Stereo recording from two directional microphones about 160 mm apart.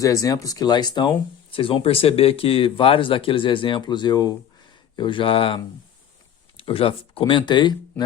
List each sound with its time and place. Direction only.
0.0 s speech: 20° left (ahead or behind)